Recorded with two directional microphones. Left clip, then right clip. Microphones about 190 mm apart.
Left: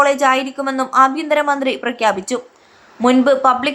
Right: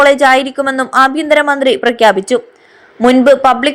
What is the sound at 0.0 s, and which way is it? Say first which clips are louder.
A woman's voice: right 6 dB; 25° right (ahead or behind).